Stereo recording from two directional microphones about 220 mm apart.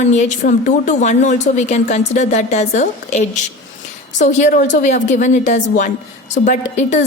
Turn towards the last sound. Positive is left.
turn(degrees=30)  # may be behind; listen again after turning